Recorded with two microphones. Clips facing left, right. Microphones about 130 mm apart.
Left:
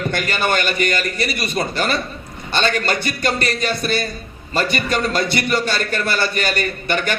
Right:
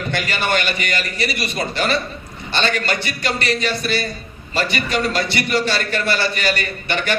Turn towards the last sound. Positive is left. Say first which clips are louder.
# left 1 dB
turn(degrees=45)  # may be behind; listen again after turning